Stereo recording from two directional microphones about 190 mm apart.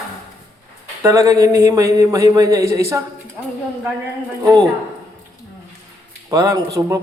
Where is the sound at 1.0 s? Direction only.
15° right (ahead or behind).